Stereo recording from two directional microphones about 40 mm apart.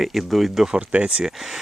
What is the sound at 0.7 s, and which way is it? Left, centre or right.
Speech, right.